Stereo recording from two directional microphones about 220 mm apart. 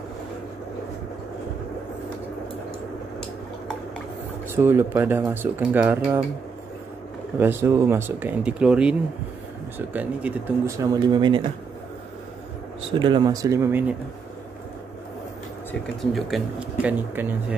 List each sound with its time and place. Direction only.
4.6 s speech: 10° right (ahead or behind)
7.3 s speech: 10° right (ahead or behind)
13.0 s speech: 20° right (ahead or behind)
16.0 s speech: centre (ahead or behind)